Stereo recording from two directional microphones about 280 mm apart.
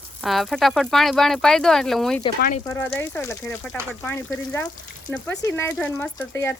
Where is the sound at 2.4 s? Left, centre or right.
Left.